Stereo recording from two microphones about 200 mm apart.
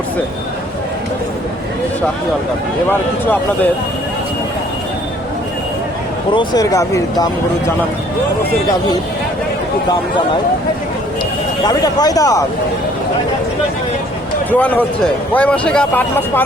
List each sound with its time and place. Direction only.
2.9 s speech: 10° left (ahead or behind)
6.3 s speech: 20° left (ahead or behind)
11.6 s speech: 20° left (ahead or behind)
14.5 s speech: 10° left (ahead or behind)